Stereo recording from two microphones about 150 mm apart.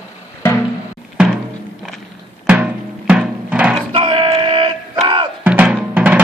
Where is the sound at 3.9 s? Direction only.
35° right (ahead or behind).